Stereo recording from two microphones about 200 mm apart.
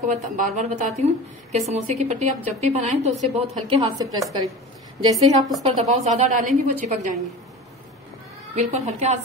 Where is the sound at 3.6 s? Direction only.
20° right (ahead or behind).